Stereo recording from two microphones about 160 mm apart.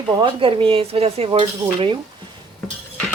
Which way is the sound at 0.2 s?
30° right (ahead or behind).